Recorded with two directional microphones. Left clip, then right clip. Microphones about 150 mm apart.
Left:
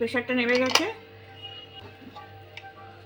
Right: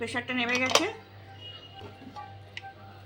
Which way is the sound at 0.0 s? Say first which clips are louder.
Left 5 dB; 70° left (ahead or behind).